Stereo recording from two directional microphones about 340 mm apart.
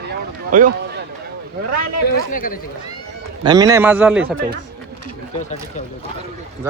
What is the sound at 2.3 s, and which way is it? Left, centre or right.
Speech, left.